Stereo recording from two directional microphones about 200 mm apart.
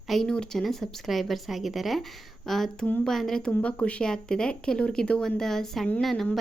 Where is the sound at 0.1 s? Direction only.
5° left (ahead or behind).